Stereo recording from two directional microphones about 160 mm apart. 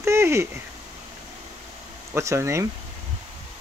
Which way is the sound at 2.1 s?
20° right (ahead or behind).